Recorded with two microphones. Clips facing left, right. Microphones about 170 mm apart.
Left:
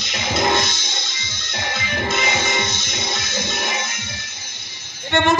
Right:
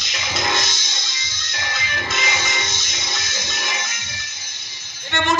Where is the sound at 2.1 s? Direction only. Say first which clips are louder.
Left 4 dB; 55° left (ahead or behind).